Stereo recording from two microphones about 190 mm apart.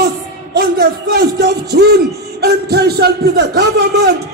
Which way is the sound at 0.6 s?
55° right (ahead or behind).